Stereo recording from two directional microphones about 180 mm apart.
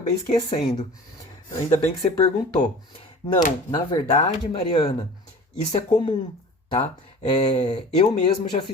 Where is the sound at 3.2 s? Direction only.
25° left (ahead or behind); by 6.1 s 40° left (ahead or behind).